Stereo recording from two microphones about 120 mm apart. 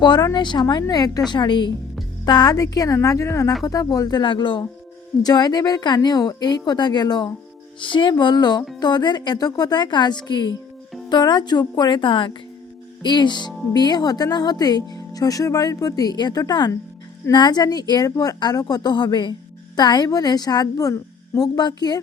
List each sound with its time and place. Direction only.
0.0 s speech: 35° left (ahead or behind)